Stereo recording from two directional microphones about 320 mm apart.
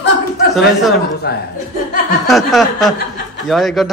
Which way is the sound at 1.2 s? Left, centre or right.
Left.